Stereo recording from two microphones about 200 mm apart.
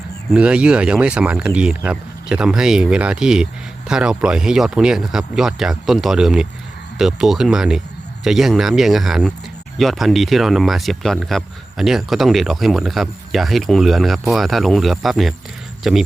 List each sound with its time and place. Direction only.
0.3 s speech: 5° right (ahead or behind)